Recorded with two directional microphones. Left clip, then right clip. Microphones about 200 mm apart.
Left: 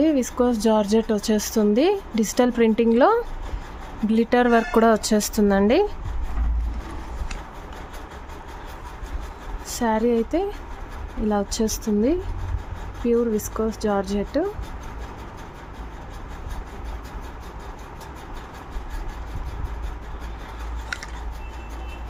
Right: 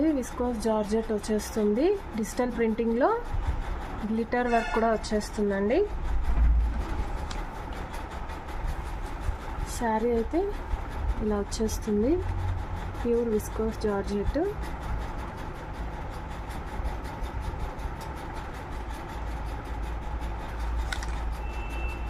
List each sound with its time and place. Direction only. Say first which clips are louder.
0.0 s speech: left 7 dB; 45° left (ahead or behind)
9.7 s speech: left 5 dB; 45° left (ahead or behind)
13.1 s speech: left 5 dB; 40° left (ahead or behind)